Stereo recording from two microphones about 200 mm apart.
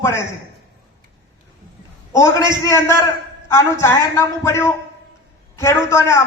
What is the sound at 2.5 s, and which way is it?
A man's voice, 15° left (ahead or behind).